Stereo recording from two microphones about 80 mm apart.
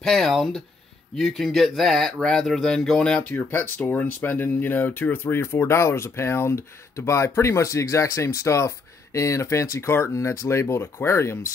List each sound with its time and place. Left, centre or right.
0.0 s speech: centre
3.3 s speech: left